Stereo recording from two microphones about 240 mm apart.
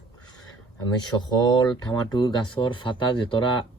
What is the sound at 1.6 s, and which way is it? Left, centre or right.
Speech, centre.